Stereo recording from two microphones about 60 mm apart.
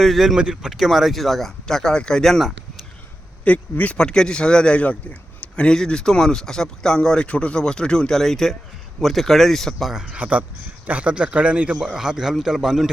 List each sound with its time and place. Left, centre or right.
0.0 s speech: centre
0.3 s speech: centre
3.4 s speech: left
3.9 s speech: centre
9.7 s a man's voice: centre
10.2 s a man's voice: right; by 12.9 s centre